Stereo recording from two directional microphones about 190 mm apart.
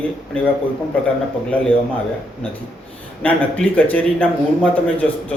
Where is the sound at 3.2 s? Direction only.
10° left (ahead or behind).